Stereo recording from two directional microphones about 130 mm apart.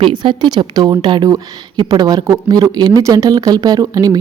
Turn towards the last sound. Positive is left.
turn(degrees=-30)  # may be behind; listen again after turning